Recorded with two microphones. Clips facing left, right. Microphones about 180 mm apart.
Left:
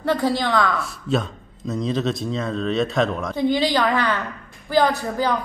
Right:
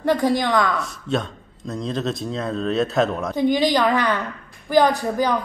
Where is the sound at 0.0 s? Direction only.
15° right (ahead or behind).